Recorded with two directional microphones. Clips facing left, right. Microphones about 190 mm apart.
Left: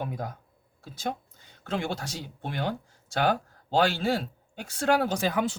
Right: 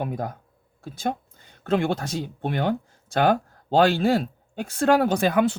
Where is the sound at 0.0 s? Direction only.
55° right (ahead or behind).